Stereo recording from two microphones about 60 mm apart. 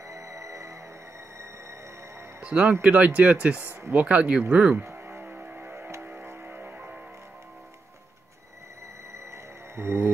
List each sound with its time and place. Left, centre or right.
0.1 s music: right
2.4 s speech: centre
4.9 s music: right
9.3 s music: right